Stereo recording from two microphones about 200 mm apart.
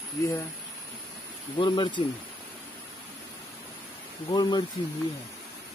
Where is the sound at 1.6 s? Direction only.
20° left (ahead or behind).